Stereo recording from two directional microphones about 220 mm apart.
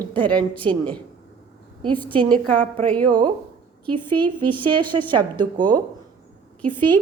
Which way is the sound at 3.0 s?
20° right (ahead or behind).